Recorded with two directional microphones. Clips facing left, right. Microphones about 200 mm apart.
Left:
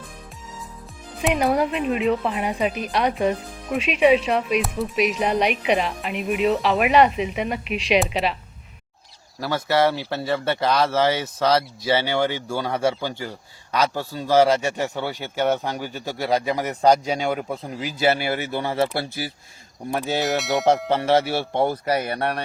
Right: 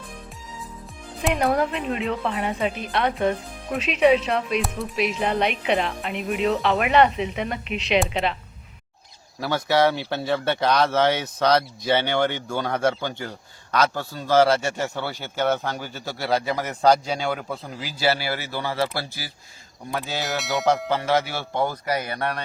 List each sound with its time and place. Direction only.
1.2 s speech: 5° left (ahead or behind)
2.6 s speech: 25° right (ahead or behind)
2.9 s speech: 15° left (ahead or behind)
5.2 s speech: 15° left (ahead or behind)
6.7 s speech: 10° left (ahead or behind)
9.4 s speech: centre (ahead or behind); by 20.2 s 25° left (ahead or behind)
20.2 s speech: centre (ahead or behind)
20.9 s speech: 30° left (ahead or behind)